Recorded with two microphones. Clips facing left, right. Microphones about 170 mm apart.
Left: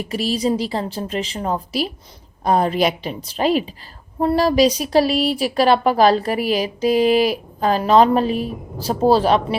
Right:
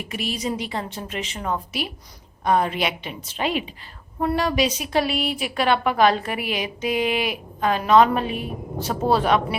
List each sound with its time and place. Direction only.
0.0 s speech: 35° left (ahead or behind)